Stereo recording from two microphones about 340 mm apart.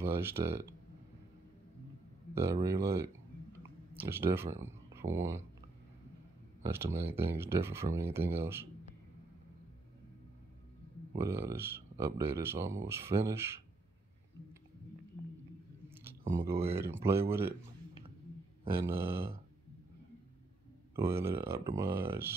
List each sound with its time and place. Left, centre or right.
0.0 s speech: centre
2.3 s speech: centre
6.6 s speech: centre
11.1 s speech: centre
16.3 s speech: centre
18.6 s speech: centre
20.9 s speech: centre